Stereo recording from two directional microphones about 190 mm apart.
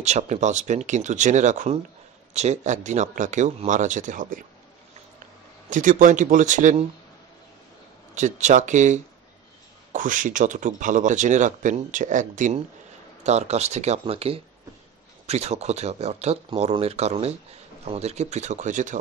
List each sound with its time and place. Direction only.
0.0 s speech: 35° right (ahead or behind)
5.7 s speech: 45° right (ahead or behind)
8.1 s speech: 40° right (ahead or behind)